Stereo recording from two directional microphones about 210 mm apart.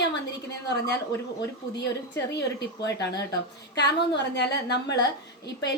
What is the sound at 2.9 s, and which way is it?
A woman's voice, 55° left (ahead or behind).